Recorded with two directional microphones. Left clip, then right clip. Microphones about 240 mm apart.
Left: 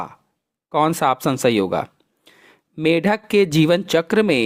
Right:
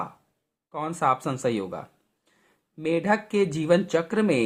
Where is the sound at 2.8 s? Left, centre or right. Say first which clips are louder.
Left 6 dB; left.